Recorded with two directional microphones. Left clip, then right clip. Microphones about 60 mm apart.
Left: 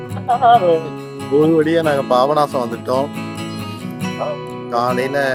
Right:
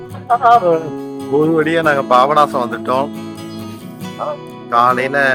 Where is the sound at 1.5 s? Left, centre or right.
Left.